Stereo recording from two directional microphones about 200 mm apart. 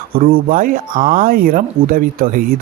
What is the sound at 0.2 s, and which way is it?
Speech, 45° right (ahead or behind).